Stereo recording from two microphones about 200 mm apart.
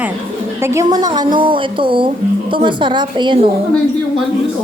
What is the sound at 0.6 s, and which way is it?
A woman's voice, 15° right (ahead or behind).